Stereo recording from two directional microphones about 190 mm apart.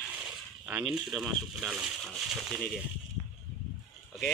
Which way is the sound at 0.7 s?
5° right (ahead or behind).